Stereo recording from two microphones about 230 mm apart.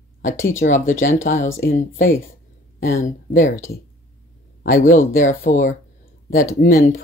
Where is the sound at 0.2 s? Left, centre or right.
Left.